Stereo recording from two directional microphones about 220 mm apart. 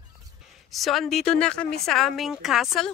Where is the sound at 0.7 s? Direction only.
Centre (ahead or behind).